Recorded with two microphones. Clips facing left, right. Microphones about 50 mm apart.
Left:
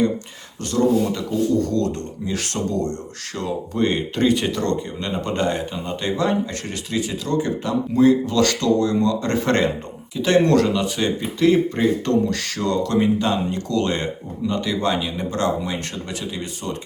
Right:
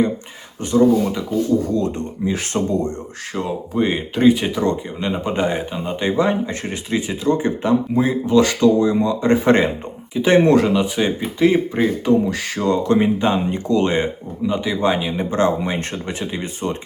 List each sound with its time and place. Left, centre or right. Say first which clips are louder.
0.6 s speech: right 4 dB; centre